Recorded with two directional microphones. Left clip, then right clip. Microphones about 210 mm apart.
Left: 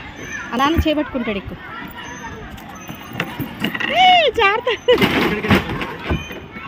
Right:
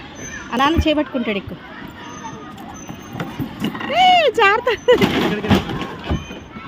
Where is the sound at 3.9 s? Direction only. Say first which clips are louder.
Even; 10° right (ahead or behind).